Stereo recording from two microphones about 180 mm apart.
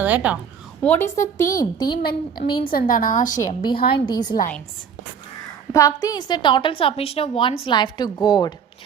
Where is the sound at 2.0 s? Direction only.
55° left (ahead or behind).